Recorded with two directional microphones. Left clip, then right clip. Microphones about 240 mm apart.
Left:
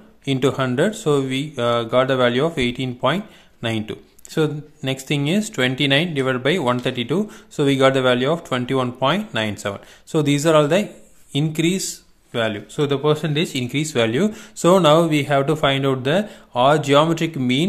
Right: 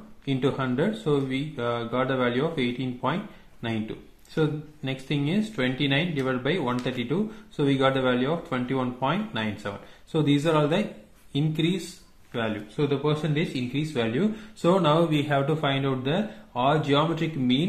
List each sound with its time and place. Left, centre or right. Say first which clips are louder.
0.2 s speech: left 7 dB; left
4.4 s speech: left 6 dB; left